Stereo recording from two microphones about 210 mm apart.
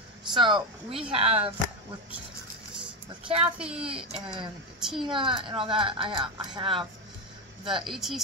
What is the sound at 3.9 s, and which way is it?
Speech, 25° right (ahead or behind).